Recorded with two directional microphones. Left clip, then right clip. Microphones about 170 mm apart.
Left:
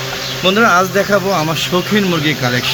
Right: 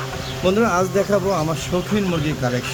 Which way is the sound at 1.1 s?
5° left (ahead or behind).